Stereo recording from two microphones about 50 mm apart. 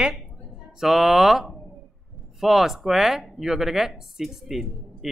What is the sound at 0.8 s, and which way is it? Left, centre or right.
Speech, centre.